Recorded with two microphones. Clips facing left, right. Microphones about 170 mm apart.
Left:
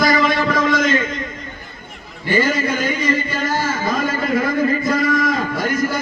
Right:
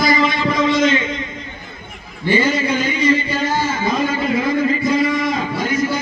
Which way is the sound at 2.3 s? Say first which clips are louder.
Right 1 dB; 50° left (ahead or behind).